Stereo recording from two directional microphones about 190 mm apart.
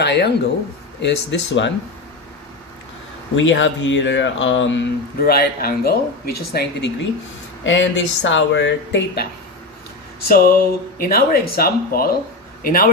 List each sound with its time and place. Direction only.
0.0 s speech: 60° left (ahead or behind)
3.3 s speech: 75° left (ahead or behind)
5.2 s speech: 55° left (ahead or behind)
7.6 s speech: 75° left (ahead or behind)
10.2 s speech: 50° left (ahead or behind)